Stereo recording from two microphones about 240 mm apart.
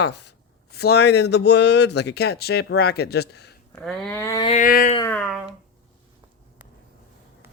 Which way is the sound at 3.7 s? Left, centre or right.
Centre.